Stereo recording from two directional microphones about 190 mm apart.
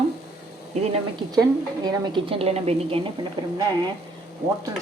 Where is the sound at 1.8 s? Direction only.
25° right (ahead or behind).